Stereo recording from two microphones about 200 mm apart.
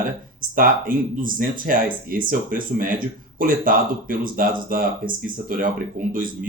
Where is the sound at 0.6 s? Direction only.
45° right (ahead or behind).